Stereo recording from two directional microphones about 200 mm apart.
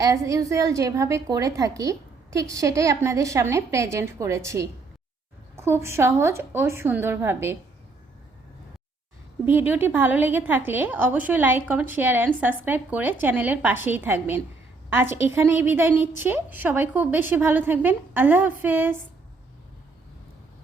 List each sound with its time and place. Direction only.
0.0 s a woman's voice: 15° right (ahead or behind)
9.5 s a woman's voice: 10° right (ahead or behind)